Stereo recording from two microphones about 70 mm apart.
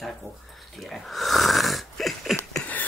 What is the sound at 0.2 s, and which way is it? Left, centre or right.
Speech, left.